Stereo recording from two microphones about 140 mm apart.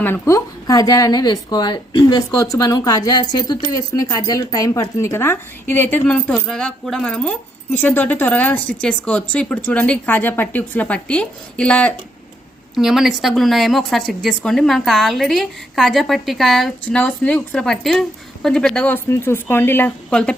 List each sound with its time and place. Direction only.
0.0 s speech: 15° left (ahead or behind)
12.7 s a woman's voice: centre (ahead or behind)